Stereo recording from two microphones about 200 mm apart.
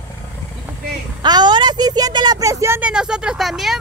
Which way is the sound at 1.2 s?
20° right (ahead or behind).